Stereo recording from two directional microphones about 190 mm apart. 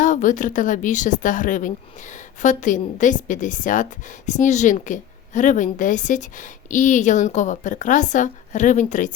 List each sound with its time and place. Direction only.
0.0 s speech: 40° left (ahead or behind)